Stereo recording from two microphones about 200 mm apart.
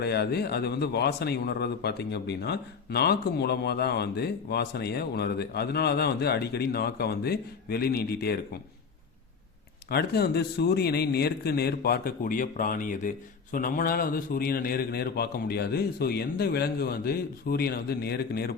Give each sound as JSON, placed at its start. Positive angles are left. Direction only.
{"t": 0.0, "sound": "a man's voice", "side_deg": 55}
{"t": 9.9, "sound": "a man's voice", "side_deg": 55}